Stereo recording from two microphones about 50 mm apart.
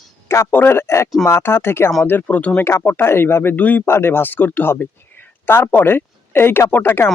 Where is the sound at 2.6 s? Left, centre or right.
Left.